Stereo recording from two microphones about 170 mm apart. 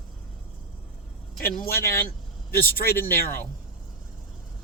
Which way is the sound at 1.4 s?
60° left (ahead or behind).